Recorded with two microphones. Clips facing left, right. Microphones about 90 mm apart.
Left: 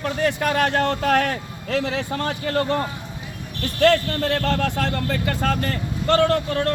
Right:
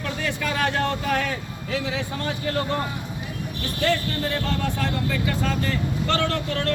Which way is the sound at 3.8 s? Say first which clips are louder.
Left 7 dB; 75° left (ahead or behind).